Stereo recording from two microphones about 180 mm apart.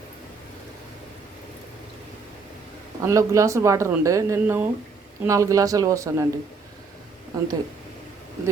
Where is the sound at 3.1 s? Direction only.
15° right (ahead or behind).